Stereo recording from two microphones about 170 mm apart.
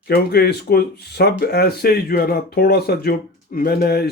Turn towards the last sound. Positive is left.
turn(degrees=65)  # may be behind; listen again after turning